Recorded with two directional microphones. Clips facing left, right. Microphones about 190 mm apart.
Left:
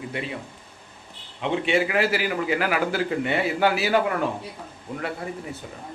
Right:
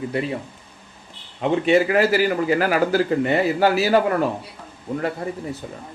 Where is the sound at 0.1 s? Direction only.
40° right (ahead or behind).